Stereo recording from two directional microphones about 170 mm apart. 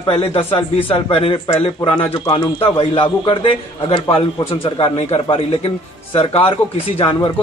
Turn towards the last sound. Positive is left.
turn(degrees=30)  # may be behind; listen again after turning